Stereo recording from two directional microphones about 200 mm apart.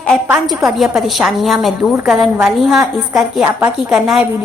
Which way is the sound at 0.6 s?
Centre (ahead or behind).